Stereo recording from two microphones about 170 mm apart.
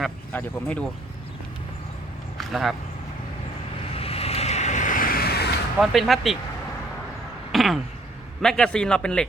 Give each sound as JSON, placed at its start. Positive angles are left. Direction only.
{"t": 0.3, "sound": "speech", "side_deg": 10}
{"t": 2.4, "sound": "speech", "side_deg": 0}
{"t": 3.9, "sound": "vehicle", "side_deg": 35}
{"t": 5.8, "sound": "a man's voice", "side_deg": 0}
{"t": 7.5, "sound": "a sound", "side_deg": 0}
{"t": 8.4, "sound": "a man's voice", "side_deg": 5}